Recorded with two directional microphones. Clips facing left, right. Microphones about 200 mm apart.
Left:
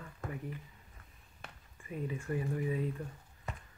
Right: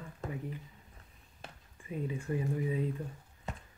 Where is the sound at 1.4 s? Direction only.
20° right (ahead or behind).